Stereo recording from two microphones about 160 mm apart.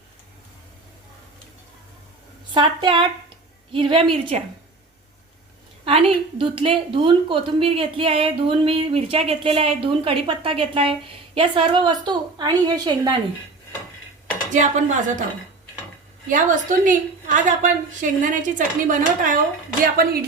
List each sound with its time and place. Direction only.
2.5 s a woman's voice: 30° right (ahead or behind)
5.8 s a woman's voice: 35° right (ahead or behind)
14.5 s a woman's voice: 50° right (ahead or behind)
16.3 s a woman's voice: 55° right (ahead or behind)